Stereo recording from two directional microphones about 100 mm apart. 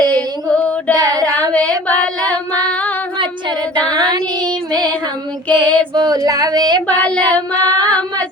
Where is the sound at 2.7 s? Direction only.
15° left (ahead or behind).